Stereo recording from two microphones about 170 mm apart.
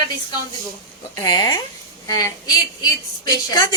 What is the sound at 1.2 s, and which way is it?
A woman's voice, 25° left (ahead or behind).